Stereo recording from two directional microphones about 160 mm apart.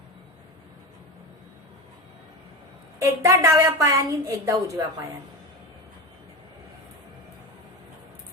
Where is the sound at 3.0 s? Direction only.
20° right (ahead or behind).